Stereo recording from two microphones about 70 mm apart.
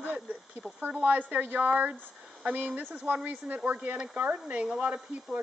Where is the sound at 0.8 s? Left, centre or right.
Right.